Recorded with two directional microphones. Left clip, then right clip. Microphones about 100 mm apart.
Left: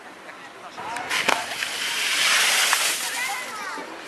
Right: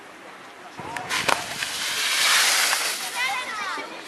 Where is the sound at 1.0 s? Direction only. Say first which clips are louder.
Left 1 dB; centre (ahead or behind).